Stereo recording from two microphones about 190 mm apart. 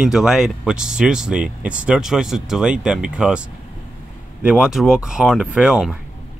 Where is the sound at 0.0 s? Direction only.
5° right (ahead or behind).